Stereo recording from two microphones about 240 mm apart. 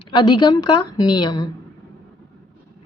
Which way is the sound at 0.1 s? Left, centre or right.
Centre.